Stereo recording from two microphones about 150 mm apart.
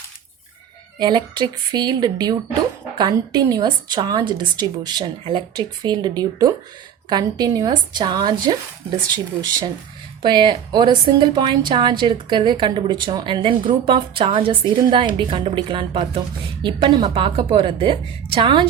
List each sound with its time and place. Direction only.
0.9 s a woman's voice: 30° right (ahead or behind)
10.2 s a woman's voice: 30° right (ahead or behind)